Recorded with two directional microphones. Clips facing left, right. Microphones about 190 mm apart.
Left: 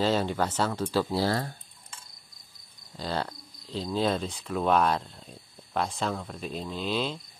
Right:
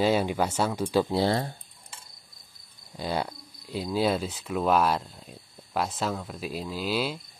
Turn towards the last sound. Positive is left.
turn(degrees=-5)  # may be behind; listen again after turning